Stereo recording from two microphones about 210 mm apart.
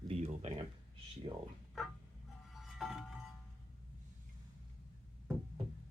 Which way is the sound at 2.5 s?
Centre (ahead or behind).